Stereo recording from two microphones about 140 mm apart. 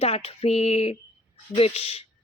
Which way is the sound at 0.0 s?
45° left (ahead or behind).